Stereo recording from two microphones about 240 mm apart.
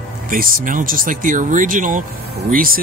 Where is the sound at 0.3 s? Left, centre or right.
Right.